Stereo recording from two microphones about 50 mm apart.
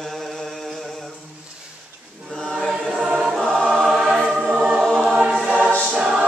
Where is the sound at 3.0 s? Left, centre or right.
Centre.